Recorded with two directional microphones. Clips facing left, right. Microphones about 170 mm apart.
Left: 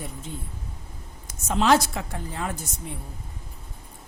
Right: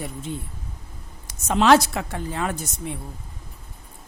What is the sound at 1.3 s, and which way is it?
A woman's voice, 75° right (ahead or behind).